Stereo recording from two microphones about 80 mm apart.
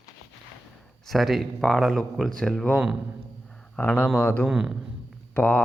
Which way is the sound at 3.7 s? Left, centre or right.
Left.